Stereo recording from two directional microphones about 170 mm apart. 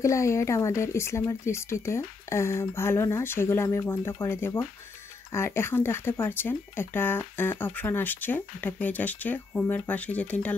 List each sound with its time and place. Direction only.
0.0 s speech: 15° left (ahead or behind)